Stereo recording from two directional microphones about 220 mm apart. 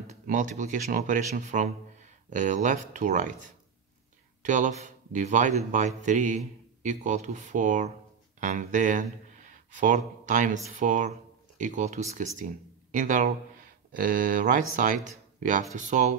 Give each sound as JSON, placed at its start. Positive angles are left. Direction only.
{"t": 0.0, "sound": "speech", "side_deg": -35}
{"t": 4.4, "sound": "speech", "side_deg": -35}